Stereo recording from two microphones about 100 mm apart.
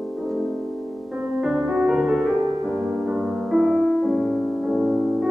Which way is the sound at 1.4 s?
5° right (ahead or behind).